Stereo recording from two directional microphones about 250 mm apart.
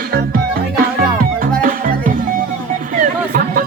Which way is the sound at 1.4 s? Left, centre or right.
Right.